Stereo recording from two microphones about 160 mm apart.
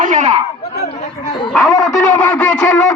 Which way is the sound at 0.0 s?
50° right (ahead or behind).